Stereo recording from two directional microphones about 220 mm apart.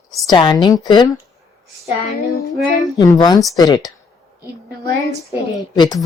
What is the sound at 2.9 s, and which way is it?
Speech, 20° left (ahead or behind).